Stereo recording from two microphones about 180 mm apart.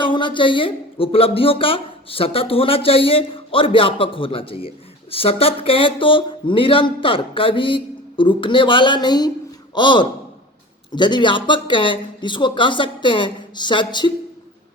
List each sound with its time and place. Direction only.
0.0 s speech: 25° left (ahead or behind)